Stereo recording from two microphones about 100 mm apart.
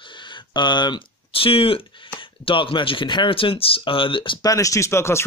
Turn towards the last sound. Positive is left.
turn(degrees=25)  # may be behind; listen again after turning